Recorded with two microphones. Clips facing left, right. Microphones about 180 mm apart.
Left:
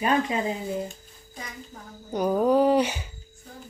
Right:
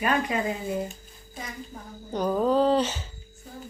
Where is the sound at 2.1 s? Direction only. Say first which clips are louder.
Left 2 dB; 10° left (ahead or behind).